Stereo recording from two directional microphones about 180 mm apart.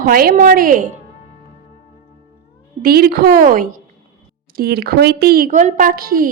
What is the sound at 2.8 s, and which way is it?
A woman's voice, 60° right (ahead or behind).